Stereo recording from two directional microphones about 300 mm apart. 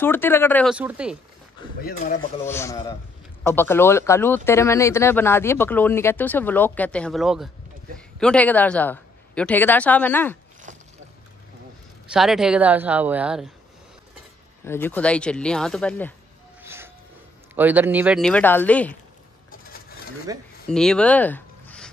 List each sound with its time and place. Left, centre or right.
0.0 s speech: centre
1.8 s speech: left
2.4 s speech: centre
12.1 s speech: centre
14.6 s speech: centre
16.6 s music: centre
17.6 s speech: centre
20.3 s speech: centre
20.6 s a sound: centre